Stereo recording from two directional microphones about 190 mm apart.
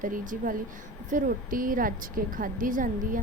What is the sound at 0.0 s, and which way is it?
A woman's voice, 45° right (ahead or behind).